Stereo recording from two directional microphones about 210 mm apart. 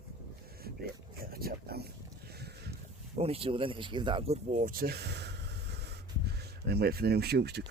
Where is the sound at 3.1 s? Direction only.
30° right (ahead or behind); by 7.6 s 50° right (ahead or behind).